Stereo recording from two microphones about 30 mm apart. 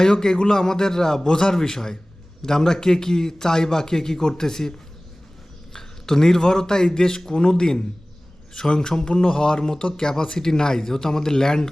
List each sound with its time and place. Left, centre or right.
0.0 s a man's voice: left
5.7 s a man's voice: left